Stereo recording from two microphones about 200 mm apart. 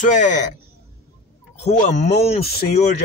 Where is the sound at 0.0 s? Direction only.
40° left (ahead or behind).